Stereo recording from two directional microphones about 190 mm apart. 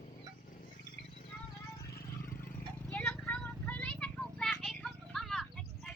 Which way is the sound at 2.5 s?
10° left (ahead or behind).